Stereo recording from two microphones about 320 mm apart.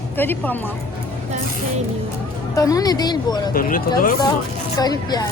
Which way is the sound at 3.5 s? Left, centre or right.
Left.